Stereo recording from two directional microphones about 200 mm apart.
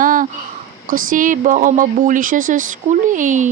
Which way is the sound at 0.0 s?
40° right (ahead or behind).